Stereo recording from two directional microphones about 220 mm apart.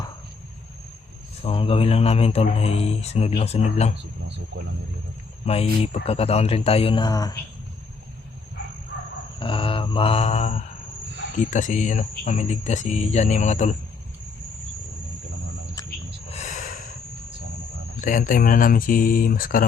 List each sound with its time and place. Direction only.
1.4 s speech: 25° left (ahead or behind)
5.5 s speech: 25° left (ahead or behind)
9.4 s mantra: 25° left (ahead or behind)
11.3 s speech: 35° left (ahead or behind)
16.3 s a sound: 35° left (ahead or behind)
18.0 s speech: 35° left (ahead or behind)